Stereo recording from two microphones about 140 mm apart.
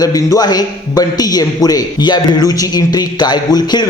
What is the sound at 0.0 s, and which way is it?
A man's voice, 25° left (ahead or behind).